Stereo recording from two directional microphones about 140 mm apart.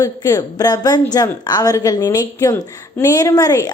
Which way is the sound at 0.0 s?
25° left (ahead or behind).